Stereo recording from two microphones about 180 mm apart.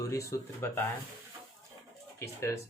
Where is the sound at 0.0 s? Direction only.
15° left (ahead or behind).